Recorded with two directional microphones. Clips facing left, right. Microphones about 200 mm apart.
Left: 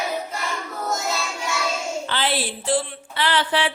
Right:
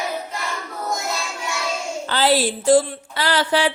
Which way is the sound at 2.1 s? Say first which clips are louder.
Right 9 dB; 40° right (ahead or behind).